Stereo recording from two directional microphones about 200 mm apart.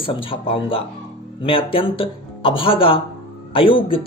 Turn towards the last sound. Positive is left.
turn(degrees=25)  # may be behind; listen again after turning